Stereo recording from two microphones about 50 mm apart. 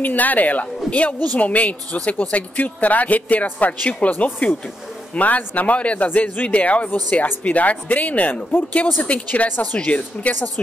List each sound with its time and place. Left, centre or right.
0.0 s speech: left